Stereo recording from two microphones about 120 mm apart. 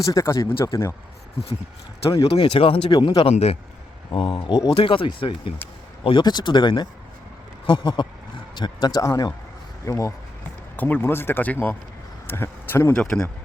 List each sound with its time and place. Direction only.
0.0 s speech: 25° left (ahead or behind)
2.3 s speech: 50° left (ahead or behind)
2.9 s speech: 40° left (ahead or behind)
3.3 s a man's voice: 60° left (ahead or behind)
4.1 s speech: 45° left (ahead or behind); by 13.3 s 10° left (ahead or behind)